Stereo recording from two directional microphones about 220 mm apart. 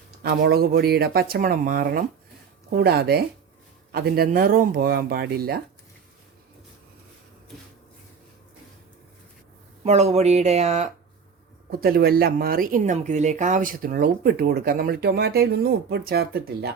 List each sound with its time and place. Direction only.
0.2 s speech: 45° right (ahead or behind)
9.8 s speech: 30° right (ahead or behind)
11.8 s speech: 45° right (ahead or behind)